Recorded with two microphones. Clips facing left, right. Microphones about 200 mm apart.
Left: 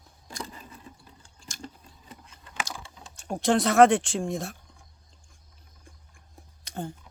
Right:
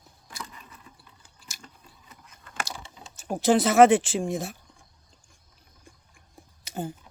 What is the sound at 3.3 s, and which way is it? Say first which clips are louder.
Speech: right 2 dB; centre (ahead or behind).